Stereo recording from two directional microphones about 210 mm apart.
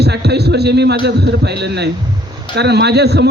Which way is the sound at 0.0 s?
50° right (ahead or behind).